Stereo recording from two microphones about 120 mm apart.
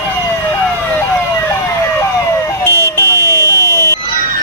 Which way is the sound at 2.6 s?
20° left (ahead or behind).